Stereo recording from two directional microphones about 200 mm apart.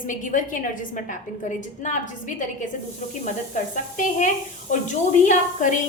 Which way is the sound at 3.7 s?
40° left (ahead or behind).